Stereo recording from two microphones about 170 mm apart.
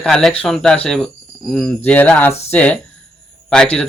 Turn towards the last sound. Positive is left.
turn(degrees=5)  # may be behind; listen again after turning